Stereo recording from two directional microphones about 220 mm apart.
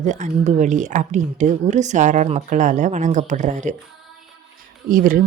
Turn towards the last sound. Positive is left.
turn(degrees=-40)  # may be behind; listen again after turning